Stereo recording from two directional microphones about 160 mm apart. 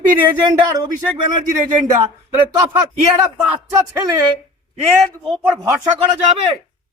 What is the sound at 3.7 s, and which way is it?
Speech, 20° right (ahead or behind).